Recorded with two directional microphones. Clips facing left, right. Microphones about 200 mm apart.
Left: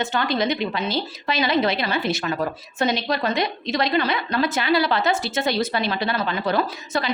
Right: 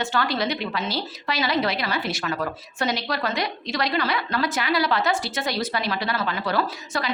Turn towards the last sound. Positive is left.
turn(degrees=20)  # may be behind; listen again after turning